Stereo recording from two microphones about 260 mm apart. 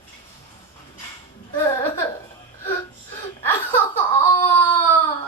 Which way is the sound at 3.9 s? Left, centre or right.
Centre.